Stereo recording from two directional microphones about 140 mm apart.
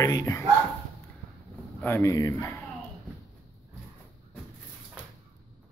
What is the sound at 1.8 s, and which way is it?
Speech, 15° left (ahead or behind).